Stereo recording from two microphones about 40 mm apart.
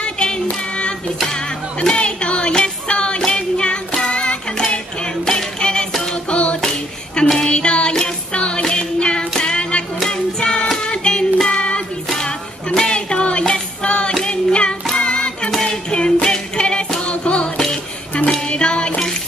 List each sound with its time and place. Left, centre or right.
0.0 s child singing: left
1.8 s music: left
3.3 s child singing: left
5.0 s music: centre
9.3 s a sound: left
10.0 s music: left
12.8 s a sound: left
14.2 s music: left